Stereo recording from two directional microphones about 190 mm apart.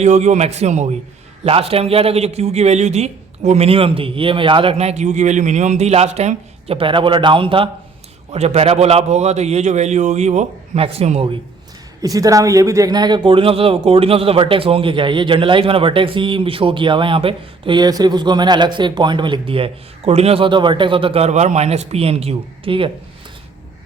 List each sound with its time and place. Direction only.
0.0 s a man's voice: 35° right (ahead or behind)
12.0 s speech: 20° right (ahead or behind)